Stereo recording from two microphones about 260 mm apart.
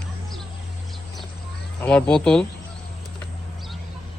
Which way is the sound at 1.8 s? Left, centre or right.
Centre.